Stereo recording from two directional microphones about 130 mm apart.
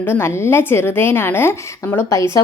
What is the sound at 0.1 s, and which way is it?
Speech, 20° left (ahead or behind).